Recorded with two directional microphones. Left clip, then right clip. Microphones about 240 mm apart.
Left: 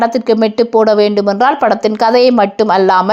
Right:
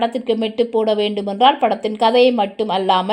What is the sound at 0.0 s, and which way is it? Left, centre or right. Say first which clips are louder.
A woman's voice: left 7 dB; centre.